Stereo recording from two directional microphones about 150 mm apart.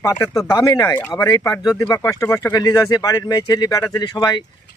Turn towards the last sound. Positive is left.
turn(degrees=30)  # may be behind; listen again after turning